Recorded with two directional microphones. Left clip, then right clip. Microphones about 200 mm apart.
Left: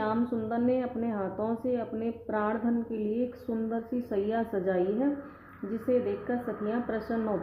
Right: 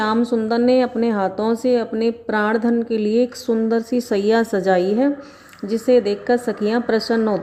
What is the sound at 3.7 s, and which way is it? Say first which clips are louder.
A woman's voice: right 14 dB; 45° right (ahead or behind).